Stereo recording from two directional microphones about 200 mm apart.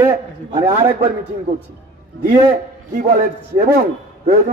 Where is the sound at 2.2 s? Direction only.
45° right (ahead or behind).